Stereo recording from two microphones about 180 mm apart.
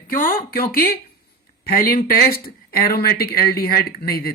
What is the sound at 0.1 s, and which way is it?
Speech, 50° left (ahead or behind).